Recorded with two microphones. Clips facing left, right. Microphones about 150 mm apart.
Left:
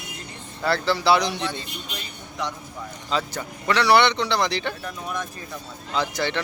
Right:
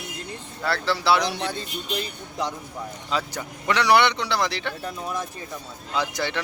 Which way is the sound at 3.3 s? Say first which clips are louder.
Left 1 dB; 15° right (ahead or behind).